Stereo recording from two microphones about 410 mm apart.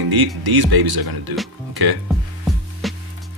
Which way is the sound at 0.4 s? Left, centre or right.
Right.